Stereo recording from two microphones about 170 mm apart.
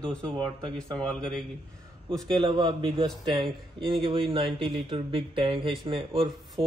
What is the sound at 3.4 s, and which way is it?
Speech, centre (ahead or behind).